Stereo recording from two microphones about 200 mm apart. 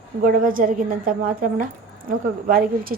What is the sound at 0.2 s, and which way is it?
A woman's voice, 40° right (ahead or behind).